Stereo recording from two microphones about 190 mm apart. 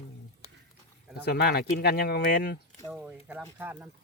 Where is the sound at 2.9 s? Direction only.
5° right (ahead or behind).